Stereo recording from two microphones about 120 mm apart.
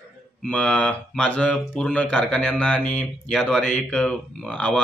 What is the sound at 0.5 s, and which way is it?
A man's voice, 10° left (ahead or behind).